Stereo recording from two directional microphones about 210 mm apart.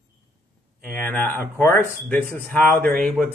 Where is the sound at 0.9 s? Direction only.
5° left (ahead or behind).